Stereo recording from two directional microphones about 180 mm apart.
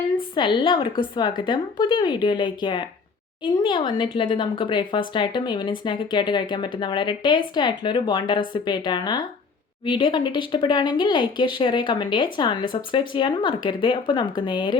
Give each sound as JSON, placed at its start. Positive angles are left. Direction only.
{"t": 0.3, "sound": "speech", "side_deg": 25}